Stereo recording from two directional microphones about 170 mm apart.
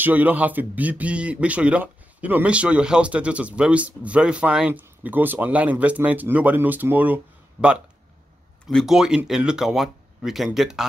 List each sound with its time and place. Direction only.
0.0 s speech: 10° right (ahead or behind)
7.6 s speech: 20° left (ahead or behind)
8.6 s speech: centre (ahead or behind)